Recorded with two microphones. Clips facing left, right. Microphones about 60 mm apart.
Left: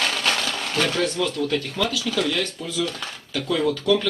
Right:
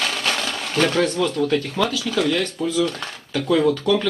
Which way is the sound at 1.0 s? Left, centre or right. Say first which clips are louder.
Right 3 dB; right.